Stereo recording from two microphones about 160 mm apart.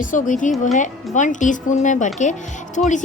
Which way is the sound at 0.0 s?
55° left (ahead or behind).